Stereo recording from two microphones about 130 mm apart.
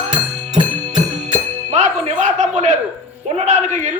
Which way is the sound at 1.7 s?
70° right (ahead or behind).